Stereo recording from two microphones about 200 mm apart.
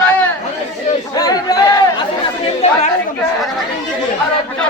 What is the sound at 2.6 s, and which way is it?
Speech, 30° left (ahead or behind).